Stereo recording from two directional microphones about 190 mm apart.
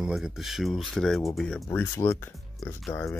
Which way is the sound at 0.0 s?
Centre (ahead or behind).